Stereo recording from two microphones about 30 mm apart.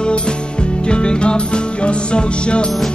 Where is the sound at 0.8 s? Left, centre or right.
Left.